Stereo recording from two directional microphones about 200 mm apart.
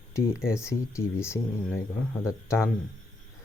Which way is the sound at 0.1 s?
15° left (ahead or behind).